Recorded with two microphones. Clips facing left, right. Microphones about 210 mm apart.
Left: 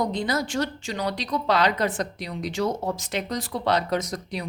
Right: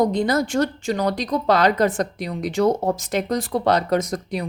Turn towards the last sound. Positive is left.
turn(degrees=-50)  # may be behind; listen again after turning